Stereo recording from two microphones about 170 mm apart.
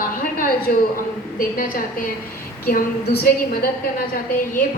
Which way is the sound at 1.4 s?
55° left (ahead or behind).